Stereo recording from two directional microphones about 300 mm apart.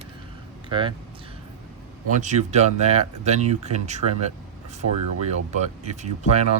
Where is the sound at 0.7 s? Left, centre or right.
Centre.